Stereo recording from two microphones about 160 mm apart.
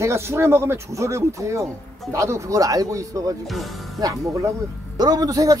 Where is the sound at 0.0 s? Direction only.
15° right (ahead or behind).